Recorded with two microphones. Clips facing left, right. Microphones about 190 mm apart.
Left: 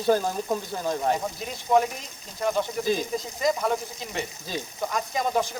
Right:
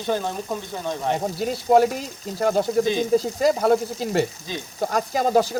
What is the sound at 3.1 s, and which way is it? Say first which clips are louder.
Sizzle: right 7 dB; 35° right (ahead or behind).